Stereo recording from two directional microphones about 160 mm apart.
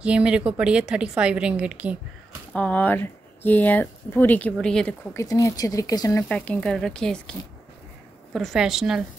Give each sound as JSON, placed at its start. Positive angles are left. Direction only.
{"t": 0.0, "sound": "a woman's voice", "side_deg": -5}
{"t": 2.5, "sound": "speech", "side_deg": 10}
{"t": 5.1, "sound": "speech", "side_deg": 20}
{"t": 6.2, "sound": "speech", "side_deg": 10}